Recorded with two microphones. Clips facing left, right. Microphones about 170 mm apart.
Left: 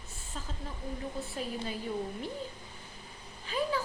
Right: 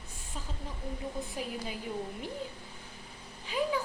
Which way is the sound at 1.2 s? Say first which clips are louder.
Even; 15° right (ahead or behind).